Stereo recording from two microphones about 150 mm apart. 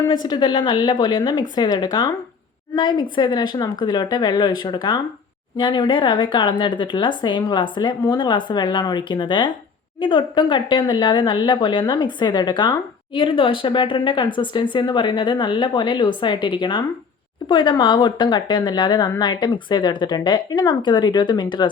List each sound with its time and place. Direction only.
0.1 s speech: 30° left (ahead or behind)